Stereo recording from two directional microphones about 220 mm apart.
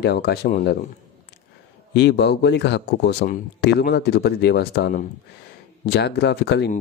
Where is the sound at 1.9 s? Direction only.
50° left (ahead or behind).